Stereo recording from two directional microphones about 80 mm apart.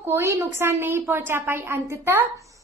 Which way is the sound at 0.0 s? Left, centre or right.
Right.